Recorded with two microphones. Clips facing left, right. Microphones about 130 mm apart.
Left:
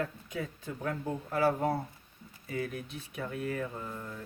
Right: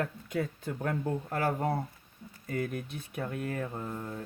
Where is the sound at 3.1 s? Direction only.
45° right (ahead or behind).